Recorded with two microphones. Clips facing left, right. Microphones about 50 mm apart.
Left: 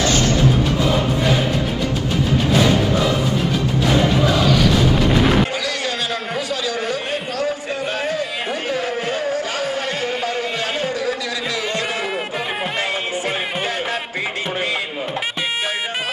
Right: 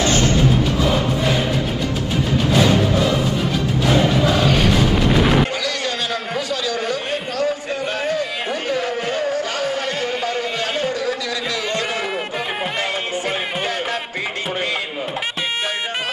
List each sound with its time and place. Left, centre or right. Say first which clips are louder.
5.1 s music: right 1 dB; centre
6.3 s a sound: even; left
8.7 s music: even; centre